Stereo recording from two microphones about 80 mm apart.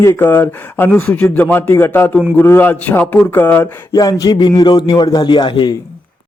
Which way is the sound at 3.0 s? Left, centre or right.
Centre.